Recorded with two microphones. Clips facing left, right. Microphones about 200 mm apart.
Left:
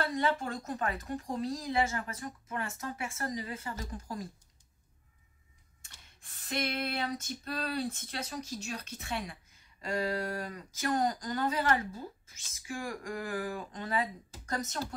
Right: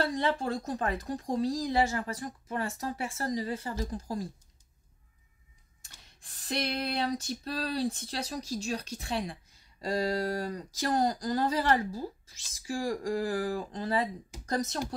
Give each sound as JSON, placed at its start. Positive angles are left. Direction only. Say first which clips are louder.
{"t": 0.0, "sound": "female singing", "louder": "right 2 dB", "side_deg": -35}
{"t": 5.8, "sound": "female singing", "louder": "right 2 dB", "side_deg": -35}